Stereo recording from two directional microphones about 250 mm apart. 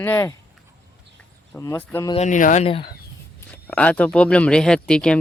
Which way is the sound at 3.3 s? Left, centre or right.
Centre.